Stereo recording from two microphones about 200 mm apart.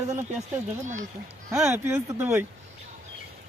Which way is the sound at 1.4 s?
15° right (ahead or behind).